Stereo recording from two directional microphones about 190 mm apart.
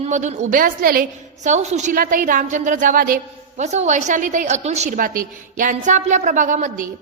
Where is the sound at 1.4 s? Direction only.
35° right (ahead or behind).